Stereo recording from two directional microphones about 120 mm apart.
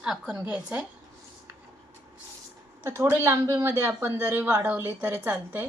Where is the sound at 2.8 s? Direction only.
20° right (ahead or behind).